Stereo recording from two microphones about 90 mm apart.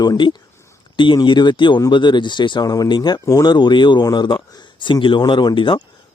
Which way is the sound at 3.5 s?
55° left (ahead or behind).